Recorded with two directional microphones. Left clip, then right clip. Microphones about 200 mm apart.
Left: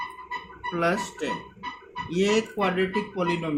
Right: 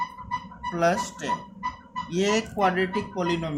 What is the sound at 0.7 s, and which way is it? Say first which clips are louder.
Speech: right 2 dB; 50° right (ahead or behind).